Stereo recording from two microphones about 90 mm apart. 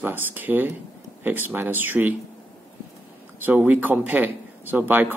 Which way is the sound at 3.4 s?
20° right (ahead or behind).